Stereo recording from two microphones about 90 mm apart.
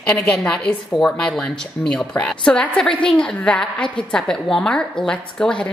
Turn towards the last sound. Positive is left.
turn(degrees=10)  # may be behind; listen again after turning